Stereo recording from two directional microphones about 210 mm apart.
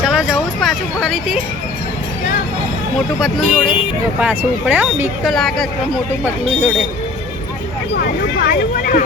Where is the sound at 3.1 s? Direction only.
Centre (ahead or behind).